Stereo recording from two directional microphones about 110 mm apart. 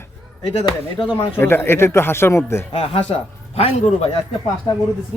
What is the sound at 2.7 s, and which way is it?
Speech, 60° left (ahead or behind).